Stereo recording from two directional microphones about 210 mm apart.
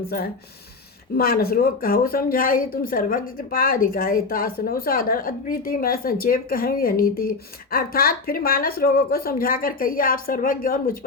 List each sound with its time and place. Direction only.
1.1 s speech: 45° left (ahead or behind)